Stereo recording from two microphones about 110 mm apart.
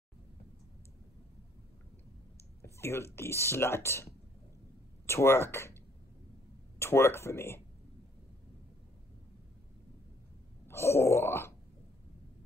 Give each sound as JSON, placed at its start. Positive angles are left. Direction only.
{"t": 2.6, "sound": "speech", "side_deg": 25}
{"t": 6.8, "sound": "speech", "side_deg": 25}
{"t": 10.7, "sound": "speech", "side_deg": 25}